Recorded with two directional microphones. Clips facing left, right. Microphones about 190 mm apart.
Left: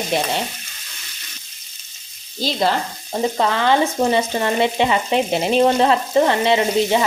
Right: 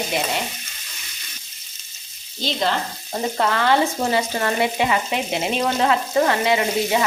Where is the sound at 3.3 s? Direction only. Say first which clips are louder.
Left 1 dB; 15° left (ahead or behind).